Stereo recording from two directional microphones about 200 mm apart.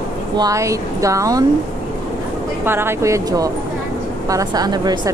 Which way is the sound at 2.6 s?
10° right (ahead or behind).